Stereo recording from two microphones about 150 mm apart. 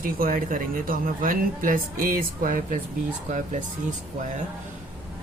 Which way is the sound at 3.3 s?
55° right (ahead or behind).